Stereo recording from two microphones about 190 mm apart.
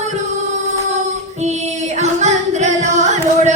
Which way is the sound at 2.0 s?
35° right (ahead or behind).